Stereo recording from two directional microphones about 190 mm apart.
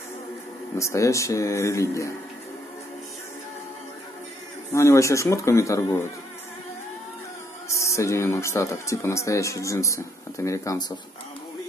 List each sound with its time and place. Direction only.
0.7 s speech: 15° left (ahead or behind)
4.7 s speech: 15° left (ahead or behind)
7.6 s speech: 15° left (ahead or behind)